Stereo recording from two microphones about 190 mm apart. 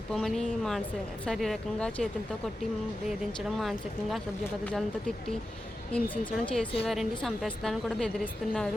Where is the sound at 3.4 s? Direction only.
Centre (ahead or behind).